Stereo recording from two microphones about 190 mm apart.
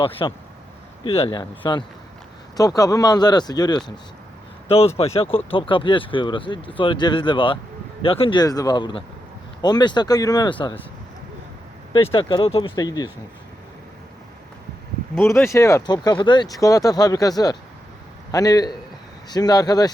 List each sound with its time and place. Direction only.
0.0 s speech: 30° left (ahead or behind)
4.9 s speech: 30° left (ahead or behind)
11.9 s speech: 25° left (ahead or behind)
15.2 s a man's voice: 15° left (ahead or behind)